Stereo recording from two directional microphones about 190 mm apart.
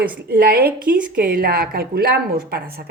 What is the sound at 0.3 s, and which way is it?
A woman's voice, 55° right (ahead or behind).